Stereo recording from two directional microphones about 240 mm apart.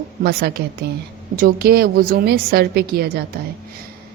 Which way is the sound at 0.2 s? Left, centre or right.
Right.